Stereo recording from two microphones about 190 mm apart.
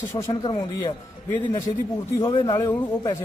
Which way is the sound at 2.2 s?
25° left (ahead or behind).